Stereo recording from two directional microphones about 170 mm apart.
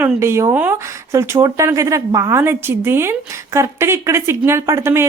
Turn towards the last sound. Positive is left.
turn(degrees=-15)  # may be behind; listen again after turning